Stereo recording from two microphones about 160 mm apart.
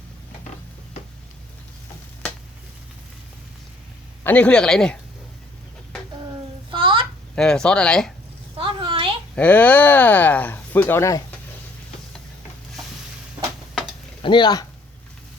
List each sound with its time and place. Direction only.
4.2 s speech: 10° left (ahead or behind)
6.7 s a sound: 30° right (ahead or behind)
7.3 s speech: 5° left (ahead or behind)
8.5 s a sound: 30° right (ahead or behind)
9.3 s speech: 10° left (ahead or behind)
14.2 s speech: 30° left (ahead or behind)